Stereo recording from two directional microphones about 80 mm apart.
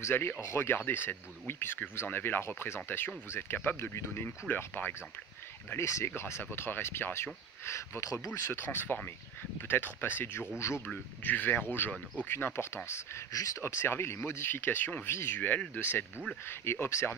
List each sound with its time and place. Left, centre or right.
0.0 s speech: left
5.7 s speech: left
8.5 s speech: left
13.6 s speech: left